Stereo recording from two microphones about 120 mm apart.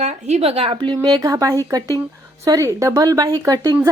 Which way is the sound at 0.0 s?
70° right (ahead or behind).